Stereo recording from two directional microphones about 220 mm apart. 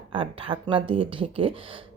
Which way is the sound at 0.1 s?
25° right (ahead or behind).